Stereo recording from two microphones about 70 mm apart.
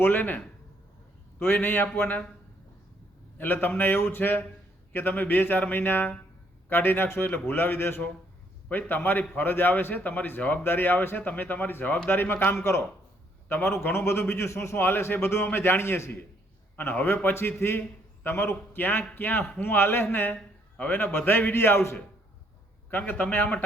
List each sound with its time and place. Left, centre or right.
0.0 s a man's voice: left
3.3 s a man's voice: left